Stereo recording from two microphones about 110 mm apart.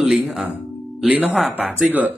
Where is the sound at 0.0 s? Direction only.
10° right (ahead or behind).